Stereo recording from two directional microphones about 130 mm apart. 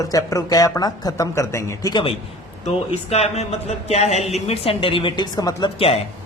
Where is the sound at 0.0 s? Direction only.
25° left (ahead or behind).